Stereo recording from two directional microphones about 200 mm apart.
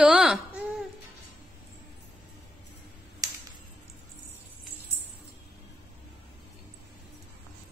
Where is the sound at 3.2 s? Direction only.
15° right (ahead or behind).